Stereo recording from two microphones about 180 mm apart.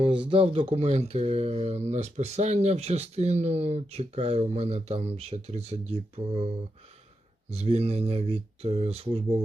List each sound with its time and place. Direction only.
0.0 s speech: 25° right (ahead or behind)
7.5 s speech: 35° right (ahead or behind)